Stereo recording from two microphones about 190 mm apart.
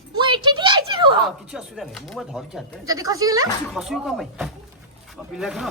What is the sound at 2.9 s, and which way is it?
Speech, 20° right (ahead or behind).